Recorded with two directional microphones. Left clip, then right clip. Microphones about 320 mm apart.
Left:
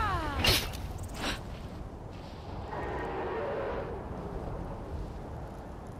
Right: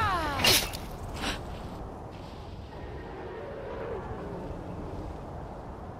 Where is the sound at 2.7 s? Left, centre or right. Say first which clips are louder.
Left 7 dB; left.